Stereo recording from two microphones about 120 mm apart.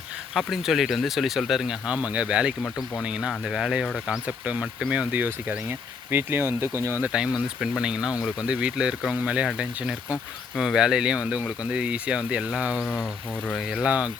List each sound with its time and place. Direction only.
0.3 s speech: centre (ahead or behind); by 7.1 s 20° right (ahead or behind)
7.1 s speech: 5° right (ahead or behind)
12.8 s speech: 10° left (ahead or behind)
13.5 s speech: 5° right (ahead or behind)